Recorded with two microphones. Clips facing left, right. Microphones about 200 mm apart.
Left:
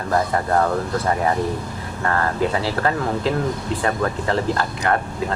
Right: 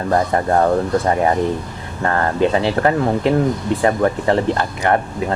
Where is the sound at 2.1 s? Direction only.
20° right (ahead or behind).